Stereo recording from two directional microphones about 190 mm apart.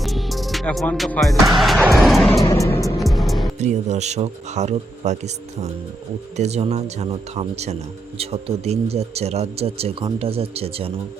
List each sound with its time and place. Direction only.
0.0 s music: centre (ahead or behind)
2.5 s music: 15° left (ahead or behind)
3.0 s music: centre (ahead or behind)
3.6 s speech: 35° right (ahead or behind)
6.3 s speech: 35° right (ahead or behind)